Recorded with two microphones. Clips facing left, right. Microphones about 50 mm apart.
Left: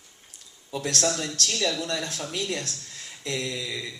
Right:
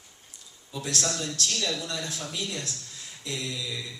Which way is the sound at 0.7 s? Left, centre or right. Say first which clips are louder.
Left 4 dB; left.